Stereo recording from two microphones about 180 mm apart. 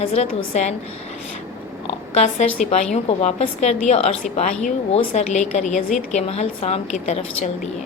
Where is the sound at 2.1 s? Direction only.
40° left (ahead or behind).